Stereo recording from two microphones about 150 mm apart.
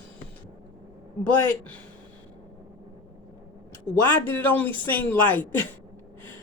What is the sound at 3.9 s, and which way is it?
Speech, 15° left (ahead or behind).